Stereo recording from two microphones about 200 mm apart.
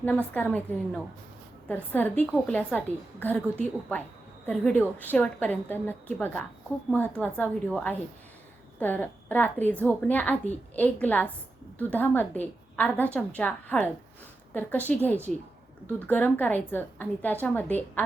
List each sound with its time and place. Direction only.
0.0 s a woman's voice: 10° left (ahead or behind)
4.4 s a woman's voice: 5° left (ahead or behind)